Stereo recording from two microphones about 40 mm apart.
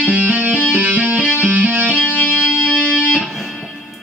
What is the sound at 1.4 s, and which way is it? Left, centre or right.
Music, right.